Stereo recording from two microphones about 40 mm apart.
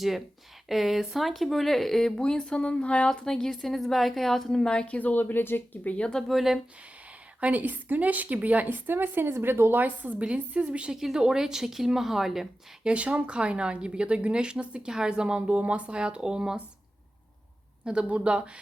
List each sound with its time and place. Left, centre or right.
0.7 s speech: centre; by 3.1 s left
3.2 s speech: centre
4.6 s speech: left
4.9 s speech: left
5.2 s speech: left
5.9 s speech: left
6.2 s speech: centre
7.4 s a woman's voice: right
9.7 s a woman's voice: right
10.2 s speech: right
10.9 s speech: centre
12.8 s speech: right
18.1 s speech: right